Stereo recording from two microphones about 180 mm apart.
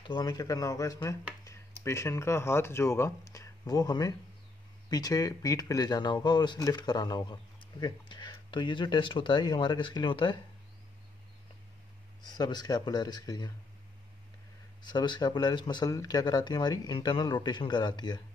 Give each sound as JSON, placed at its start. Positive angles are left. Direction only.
{"t": 0.0, "sound": "speech", "side_deg": 25}
{"t": 12.2, "sound": "speech", "side_deg": 25}
{"t": 14.8, "sound": "speech", "side_deg": 25}